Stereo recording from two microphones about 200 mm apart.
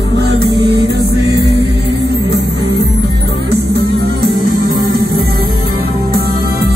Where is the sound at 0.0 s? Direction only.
55° right (ahead or behind).